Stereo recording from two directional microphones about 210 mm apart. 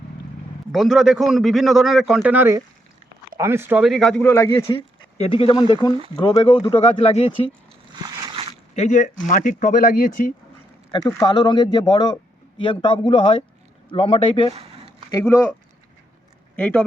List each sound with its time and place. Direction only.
0.7 s a man's voice: centre (ahead or behind)
5.1 s speech: 30° left (ahead or behind)
8.0 s a sound: 20° right (ahead or behind)
8.7 s speech: 35° left (ahead or behind)
10.9 s speech: 20° left (ahead or behind)
15.1 s speech: 10° left (ahead or behind)
16.6 s speech: 5° left (ahead or behind)